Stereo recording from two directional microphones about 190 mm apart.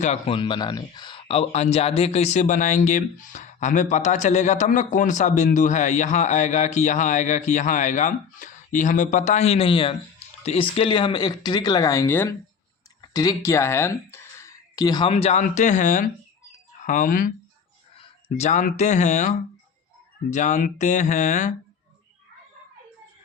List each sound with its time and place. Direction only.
0.0 s speech: 30° left (ahead or behind)
17.9 s speech: 30° left (ahead or behind)